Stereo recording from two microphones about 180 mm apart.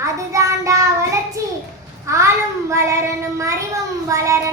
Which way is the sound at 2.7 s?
15° right (ahead or behind).